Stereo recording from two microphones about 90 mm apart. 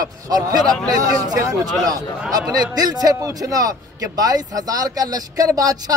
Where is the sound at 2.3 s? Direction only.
45° right (ahead or behind).